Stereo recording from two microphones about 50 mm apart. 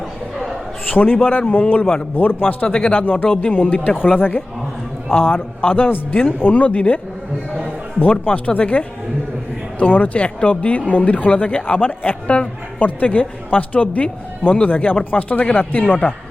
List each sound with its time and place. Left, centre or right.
0.9 s speech: left
3.0 s speech: left